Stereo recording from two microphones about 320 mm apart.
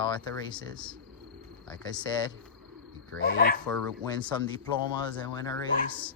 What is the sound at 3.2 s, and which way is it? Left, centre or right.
Speech, left.